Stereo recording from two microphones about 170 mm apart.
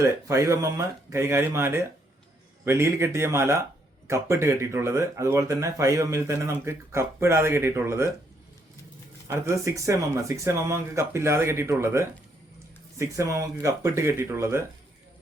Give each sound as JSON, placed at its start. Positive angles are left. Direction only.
{"t": 0.0, "sound": "speech", "side_deg": -15}
{"t": 9.2, "sound": "speech", "side_deg": -15}